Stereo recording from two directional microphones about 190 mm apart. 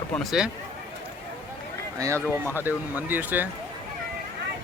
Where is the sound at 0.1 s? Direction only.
Centre (ahead or behind).